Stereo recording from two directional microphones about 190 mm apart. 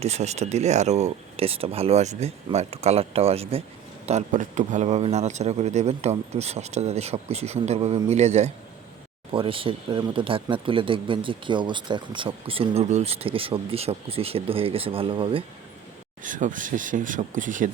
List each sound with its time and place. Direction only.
0.0 s a man's voice: 35° right (ahead or behind)
16.2 s speech: 45° right (ahead or behind)